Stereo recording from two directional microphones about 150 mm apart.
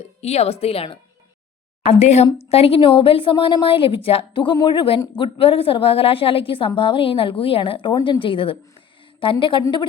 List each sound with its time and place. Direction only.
0.2 s speech: 45° left (ahead or behind)